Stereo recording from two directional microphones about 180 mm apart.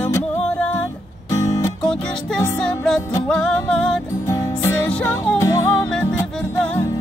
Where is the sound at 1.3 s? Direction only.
15° left (ahead or behind).